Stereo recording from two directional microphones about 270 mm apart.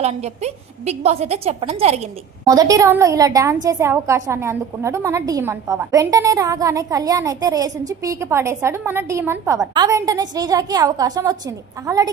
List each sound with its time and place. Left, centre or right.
0.0 s a woman's voice: right